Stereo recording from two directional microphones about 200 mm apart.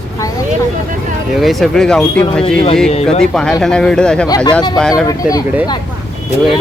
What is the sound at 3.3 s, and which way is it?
Speech, 5° left (ahead or behind).